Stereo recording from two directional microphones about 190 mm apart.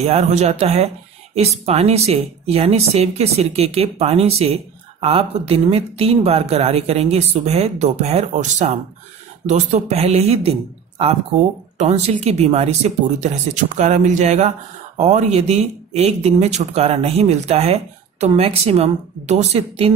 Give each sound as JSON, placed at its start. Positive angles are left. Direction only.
{"t": 0.0, "sound": "speech", "side_deg": -35}
{"t": 11.8, "sound": "speech", "side_deg": -35}